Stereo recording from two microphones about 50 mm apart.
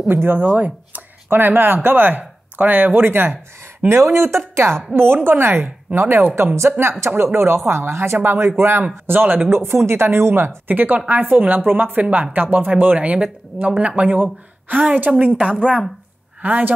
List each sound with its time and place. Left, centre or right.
0.1 s a woman's voice: right
0.5 s speech: right
1.3 s speech: right
3.9 s speech: right
4.9 s a woman's voice: right
6.3 s a woman's voice: right
9.5 s speech: right
10.7 s speech: right
16.3 s a woman's voice: right